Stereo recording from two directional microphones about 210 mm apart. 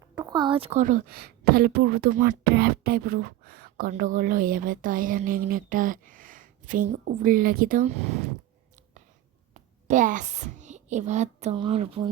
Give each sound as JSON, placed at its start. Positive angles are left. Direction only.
{"t": 0.2, "sound": "speech", "side_deg": -20}
{"t": 9.8, "sound": "a woman's voice", "side_deg": -35}